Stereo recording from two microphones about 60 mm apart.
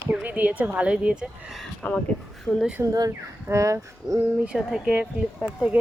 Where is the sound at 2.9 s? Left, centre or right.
Right.